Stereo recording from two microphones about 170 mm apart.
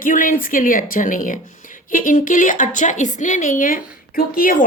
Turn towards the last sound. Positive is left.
turn(degrees=55)  # may be behind; listen again after turning